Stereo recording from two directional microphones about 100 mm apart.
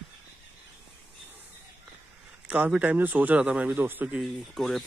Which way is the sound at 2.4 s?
15° right (ahead or behind).